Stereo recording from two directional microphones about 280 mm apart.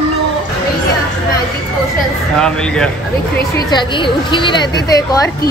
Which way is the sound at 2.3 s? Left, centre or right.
Centre.